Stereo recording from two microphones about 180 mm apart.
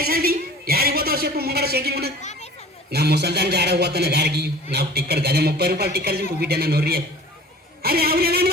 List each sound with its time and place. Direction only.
0.0 s a man's voice: 55° right (ahead or behind)